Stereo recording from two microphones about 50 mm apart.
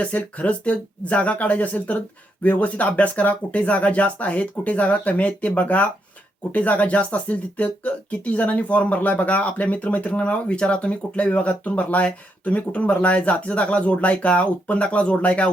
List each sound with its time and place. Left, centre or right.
0.0 s speech: left